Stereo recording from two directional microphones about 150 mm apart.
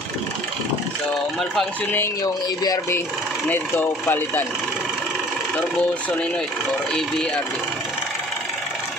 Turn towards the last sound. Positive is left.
turn(degrees=5)  # may be behind; listen again after turning